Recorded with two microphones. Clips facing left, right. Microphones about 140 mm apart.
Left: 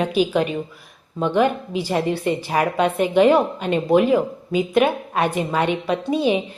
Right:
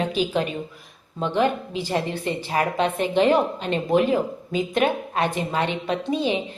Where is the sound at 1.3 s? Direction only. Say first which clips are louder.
Left 3 dB; 15° left (ahead or behind).